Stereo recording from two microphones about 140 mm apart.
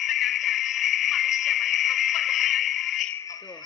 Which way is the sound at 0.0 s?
Centre (ahead or behind).